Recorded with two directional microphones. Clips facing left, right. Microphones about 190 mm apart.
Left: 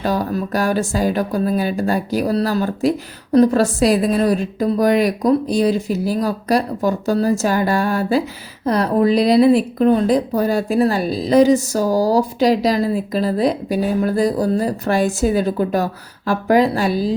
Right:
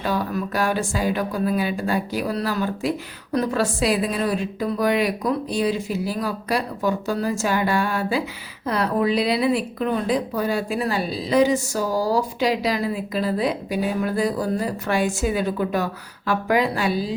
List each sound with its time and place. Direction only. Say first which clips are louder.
0.0 s a woman's voice: left 4 dB; 40° left (ahead or behind)